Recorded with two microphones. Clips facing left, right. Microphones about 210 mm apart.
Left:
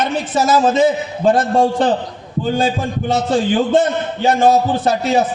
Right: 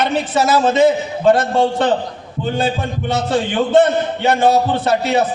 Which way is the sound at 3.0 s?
65° right (ahead or behind).